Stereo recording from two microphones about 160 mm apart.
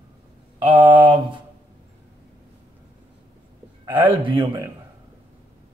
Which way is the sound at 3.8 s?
10° right (ahead or behind).